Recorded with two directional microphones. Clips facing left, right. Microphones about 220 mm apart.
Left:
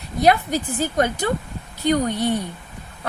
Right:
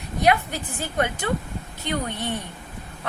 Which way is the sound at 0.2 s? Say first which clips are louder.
Left 4 dB; 35° left (ahead or behind).